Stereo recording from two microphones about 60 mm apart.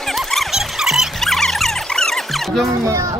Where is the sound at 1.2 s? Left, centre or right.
Centre.